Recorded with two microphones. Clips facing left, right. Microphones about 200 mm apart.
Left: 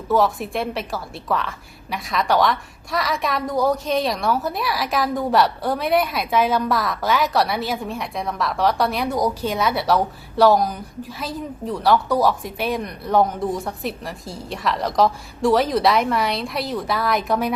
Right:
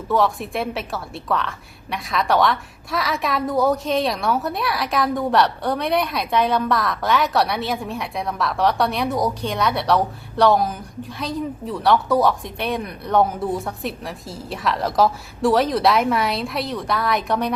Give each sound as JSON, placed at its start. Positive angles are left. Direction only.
{"t": 0.1, "sound": "a woman's voice", "side_deg": 0}